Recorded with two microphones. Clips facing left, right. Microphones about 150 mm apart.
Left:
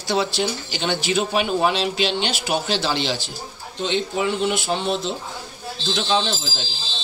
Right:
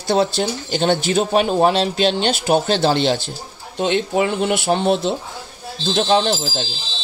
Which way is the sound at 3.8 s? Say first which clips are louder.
Right 5 dB; 60° right (ahead or behind).